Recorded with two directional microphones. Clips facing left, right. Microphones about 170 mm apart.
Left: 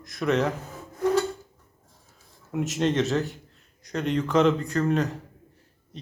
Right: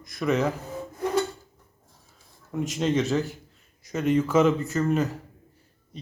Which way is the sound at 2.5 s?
Centre (ahead or behind).